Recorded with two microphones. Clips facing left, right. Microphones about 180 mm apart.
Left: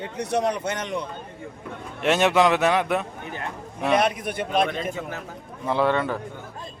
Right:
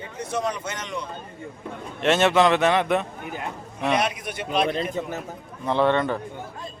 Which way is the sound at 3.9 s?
50° left (ahead or behind).